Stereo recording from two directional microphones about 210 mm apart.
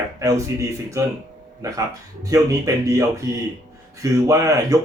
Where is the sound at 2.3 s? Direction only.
15° right (ahead or behind).